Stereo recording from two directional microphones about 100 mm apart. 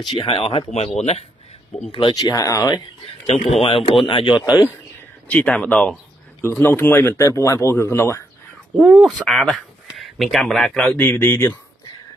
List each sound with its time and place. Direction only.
0.2 s speech: 70° left (ahead or behind)
0.7 s speech: 90° left
1.9 s speech: 55° left (ahead or behind); by 2.8 s 35° left (ahead or behind)
3.3 s speech: 80° left
4.0 s speech: 55° left (ahead or behind)
5.3 s speech: 10° left (ahead or behind)
6.5 s speech: 25° left (ahead or behind)
7.2 s speech: 30° left (ahead or behind)
8.7 s speech: 5° right (ahead or behind)
11.0 s speech: 20° left (ahead or behind)